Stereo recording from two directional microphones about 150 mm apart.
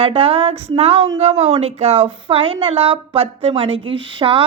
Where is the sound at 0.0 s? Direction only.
40° right (ahead or behind).